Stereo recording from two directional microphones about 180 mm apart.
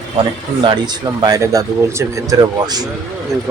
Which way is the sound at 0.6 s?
25° right (ahead or behind).